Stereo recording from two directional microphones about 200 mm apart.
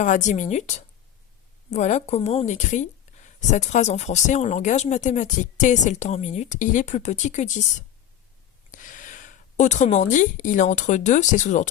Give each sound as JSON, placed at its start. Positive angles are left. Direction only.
{"t": 0.0, "sound": "speech", "side_deg": 40}
{"t": 8.7, "sound": "a woman's voice", "side_deg": 40}